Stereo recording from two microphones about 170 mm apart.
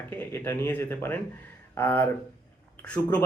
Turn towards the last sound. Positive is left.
turn(degrees=10)  # may be behind; listen again after turning